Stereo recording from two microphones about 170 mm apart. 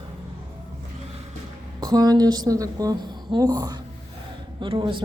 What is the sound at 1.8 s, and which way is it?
A woman's voice, 25° right (ahead or behind).